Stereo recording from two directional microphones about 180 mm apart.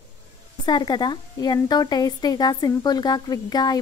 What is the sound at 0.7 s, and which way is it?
A woman's voice, 25° left (ahead or behind).